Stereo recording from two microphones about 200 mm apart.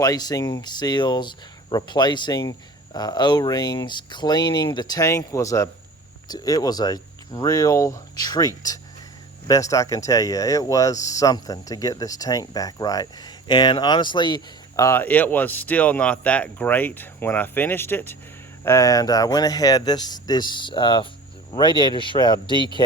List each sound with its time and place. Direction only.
0.0 s speech: 20° left (ahead or behind)